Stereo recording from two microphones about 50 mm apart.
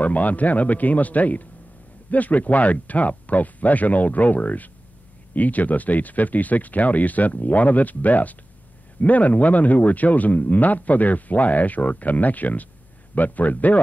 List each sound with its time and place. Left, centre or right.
0.0 s speech: left